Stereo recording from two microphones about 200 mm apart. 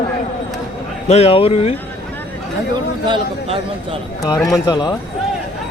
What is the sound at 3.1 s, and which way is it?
Speech, 25° right (ahead or behind).